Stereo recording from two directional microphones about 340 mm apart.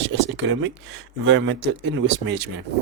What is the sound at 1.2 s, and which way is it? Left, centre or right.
Speech, right.